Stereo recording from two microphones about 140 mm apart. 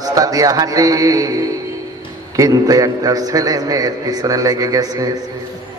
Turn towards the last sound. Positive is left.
turn(degrees=-25)  # may be behind; listen again after turning